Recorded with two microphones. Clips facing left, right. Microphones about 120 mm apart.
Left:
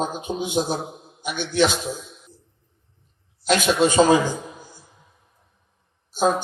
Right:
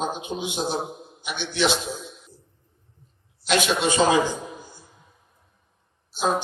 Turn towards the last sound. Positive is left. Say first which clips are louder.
# left 3 dB
turn(degrees=45)  # may be behind; listen again after turning